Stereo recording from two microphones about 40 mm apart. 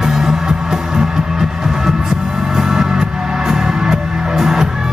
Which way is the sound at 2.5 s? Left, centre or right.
Centre.